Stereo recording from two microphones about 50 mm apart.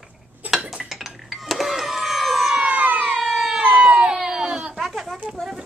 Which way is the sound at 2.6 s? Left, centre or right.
Right.